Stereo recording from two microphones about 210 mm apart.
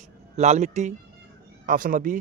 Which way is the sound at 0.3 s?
35° right (ahead or behind).